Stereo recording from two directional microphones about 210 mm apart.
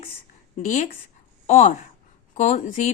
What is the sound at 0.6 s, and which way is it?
Speech, 35° left (ahead or behind).